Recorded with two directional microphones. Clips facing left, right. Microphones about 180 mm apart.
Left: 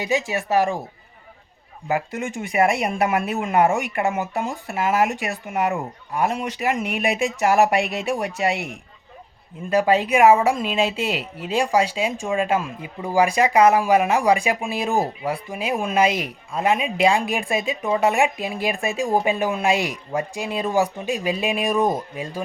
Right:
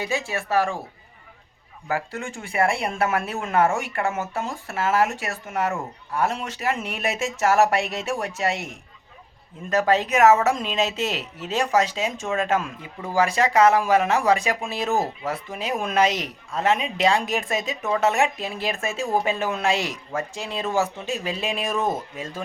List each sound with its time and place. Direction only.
0.0 s speech: 15° left (ahead or behind)
1.9 s speech: 15° left (ahead or behind)